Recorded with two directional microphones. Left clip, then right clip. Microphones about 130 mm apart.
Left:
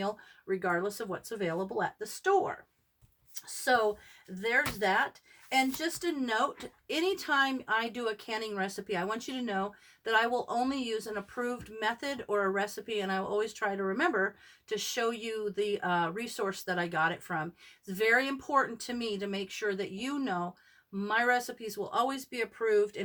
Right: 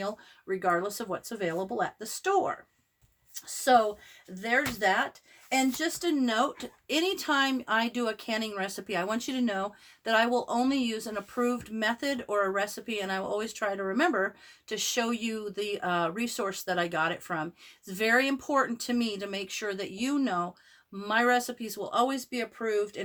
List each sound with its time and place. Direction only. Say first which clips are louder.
0.0 s speech: even; 30° right (ahead or behind)